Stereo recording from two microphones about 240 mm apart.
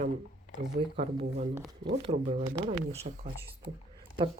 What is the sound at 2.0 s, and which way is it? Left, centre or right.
Speech, right.